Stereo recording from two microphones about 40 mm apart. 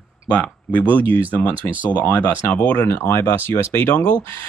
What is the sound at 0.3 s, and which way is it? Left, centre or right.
Speech, left.